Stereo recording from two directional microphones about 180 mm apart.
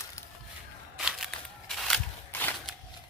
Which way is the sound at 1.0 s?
5° right (ahead or behind).